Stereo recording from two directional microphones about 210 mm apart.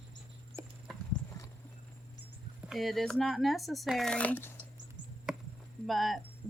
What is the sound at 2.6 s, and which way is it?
Speech, centre (ahead or behind).